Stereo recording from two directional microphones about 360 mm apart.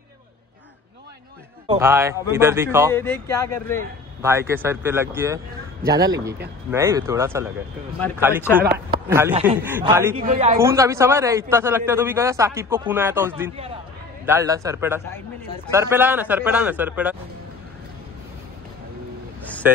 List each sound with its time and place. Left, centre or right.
1.7 s a man's voice: centre
2.9 s speech: centre
4.2 s a man's voice: centre
10.2 s a woman's voice: right
10.6 s a man's voice: centre
19.6 s speech: centre